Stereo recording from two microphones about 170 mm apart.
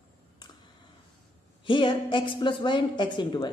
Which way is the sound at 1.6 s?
30° left (ahead or behind).